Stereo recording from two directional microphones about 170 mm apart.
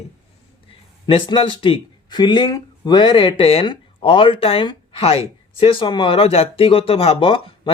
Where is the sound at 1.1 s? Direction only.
30° left (ahead or behind).